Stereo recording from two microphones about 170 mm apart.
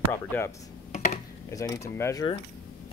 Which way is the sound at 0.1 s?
15° left (ahead or behind).